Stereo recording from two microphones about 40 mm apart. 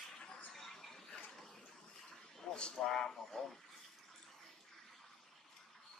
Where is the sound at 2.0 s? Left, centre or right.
Centre.